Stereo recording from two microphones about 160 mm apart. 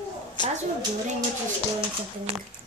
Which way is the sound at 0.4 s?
30° left (ahead or behind).